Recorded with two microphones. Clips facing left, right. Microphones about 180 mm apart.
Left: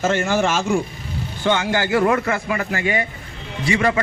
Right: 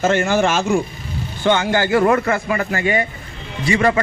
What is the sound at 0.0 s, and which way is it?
A man's voice, 65° right (ahead or behind).